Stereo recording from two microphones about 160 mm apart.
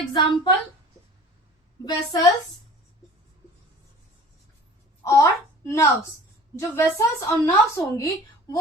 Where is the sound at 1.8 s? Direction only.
20° left (ahead or behind).